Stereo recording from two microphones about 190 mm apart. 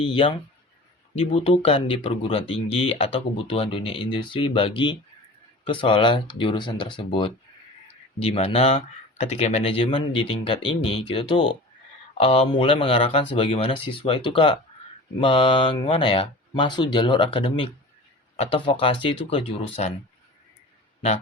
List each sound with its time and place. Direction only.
0.0 s speech: 30° left (ahead or behind)